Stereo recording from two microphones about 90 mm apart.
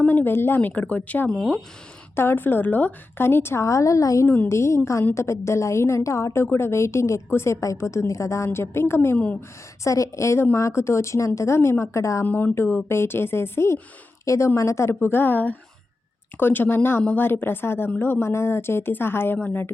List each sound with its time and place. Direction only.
0.0 s a woman's voice: 20° left (ahead or behind)
1.4 s speech: centre (ahead or behind)
2.1 s a woman's voice: 25° left (ahead or behind)
9.1 s a woman's voice: 15° left (ahead or behind)
9.8 s a woman's voice: 35° left (ahead or behind)
12.2 s a woman's voice: 20° left (ahead or behind)
15.0 s a woman's voice: 25° left (ahead or behind)